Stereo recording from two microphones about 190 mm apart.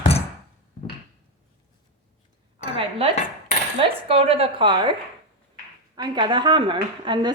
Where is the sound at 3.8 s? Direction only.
30° right (ahead or behind).